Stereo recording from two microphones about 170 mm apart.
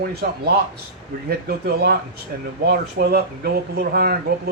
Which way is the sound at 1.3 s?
70° right (ahead or behind).